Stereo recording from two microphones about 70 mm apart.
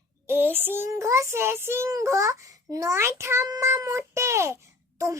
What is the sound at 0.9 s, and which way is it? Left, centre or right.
Child singing, right.